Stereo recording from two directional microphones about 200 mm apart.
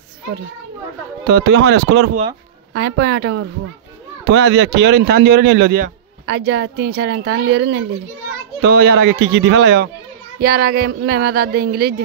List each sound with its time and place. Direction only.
1.2 s a man's voice: 55° right (ahead or behind)